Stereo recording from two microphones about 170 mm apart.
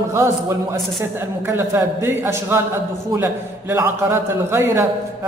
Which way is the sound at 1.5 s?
15° right (ahead or behind).